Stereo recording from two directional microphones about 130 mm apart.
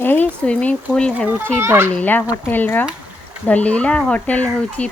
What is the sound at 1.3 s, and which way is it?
Speech, 15° right (ahead or behind).